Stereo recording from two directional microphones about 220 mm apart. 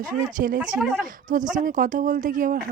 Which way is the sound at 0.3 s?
35° right (ahead or behind).